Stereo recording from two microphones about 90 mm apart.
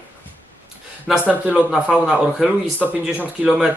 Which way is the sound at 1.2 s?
15° right (ahead or behind).